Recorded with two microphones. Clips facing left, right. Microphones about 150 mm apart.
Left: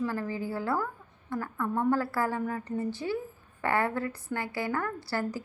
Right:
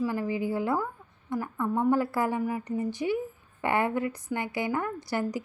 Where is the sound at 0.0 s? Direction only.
15° right (ahead or behind).